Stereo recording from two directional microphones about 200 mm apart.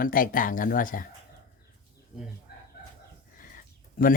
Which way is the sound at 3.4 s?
45° left (ahead or behind).